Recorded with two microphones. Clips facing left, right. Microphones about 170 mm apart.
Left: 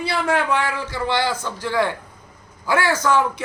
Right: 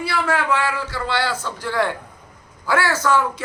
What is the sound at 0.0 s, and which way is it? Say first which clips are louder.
Speech: left 1 dB; 20° left (ahead or behind).